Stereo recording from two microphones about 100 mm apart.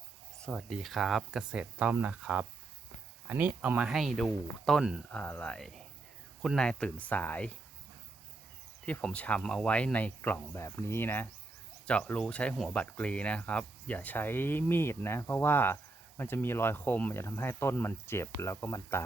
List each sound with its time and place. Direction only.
0.4 s speech: centre (ahead or behind)
3.9 s speech: centre (ahead or behind)
5.1 s speech: 15° left (ahead or behind)
5.5 s speech: 5° left (ahead or behind)
8.9 s speech: 10° left (ahead or behind)